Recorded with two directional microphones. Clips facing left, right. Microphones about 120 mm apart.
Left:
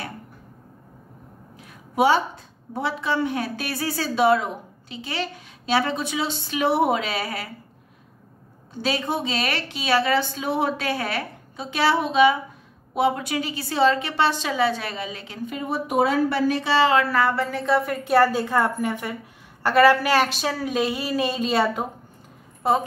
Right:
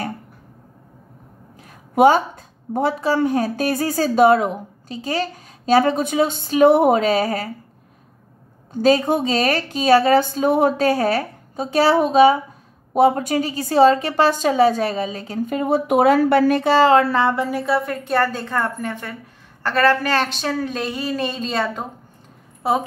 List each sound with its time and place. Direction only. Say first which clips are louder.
1.7 s a woman's voice: right 6 dB; 50° right (ahead or behind)
8.8 s a woman's voice: right 9 dB; 45° right (ahead or behind)
17.0 s speech: right 3 dB; 25° right (ahead or behind)
17.5 s a woman's voice: right 1 dB; 5° right (ahead or behind)